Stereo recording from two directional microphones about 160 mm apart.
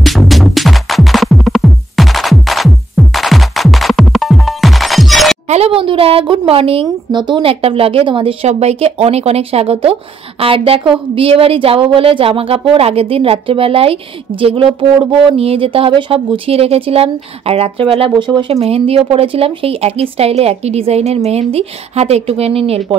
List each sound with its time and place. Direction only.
0.0 s music: centre (ahead or behind)
5.5 s speech: 35° right (ahead or behind)